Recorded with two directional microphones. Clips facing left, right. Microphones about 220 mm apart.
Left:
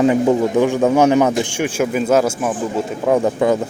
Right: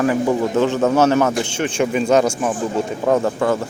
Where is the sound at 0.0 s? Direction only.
20° left (ahead or behind); by 3.2 s centre (ahead or behind).